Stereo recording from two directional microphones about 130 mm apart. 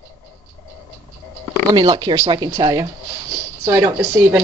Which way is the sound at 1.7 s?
35° right (ahead or behind).